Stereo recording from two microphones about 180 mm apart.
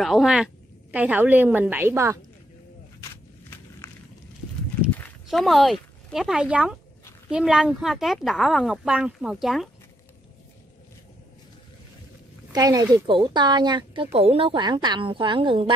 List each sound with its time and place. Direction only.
0.0 s a woman's voice: centre (ahead or behind)
3.0 s walk: 15° left (ahead or behind)
4.9 s speech: 5° left (ahead or behind)
12.5 s speech: 20° right (ahead or behind)